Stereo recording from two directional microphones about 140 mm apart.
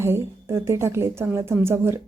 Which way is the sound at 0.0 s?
20° right (ahead or behind).